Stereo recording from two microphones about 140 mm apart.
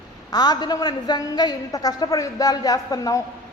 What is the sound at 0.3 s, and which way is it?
A man's voice, 30° left (ahead or behind).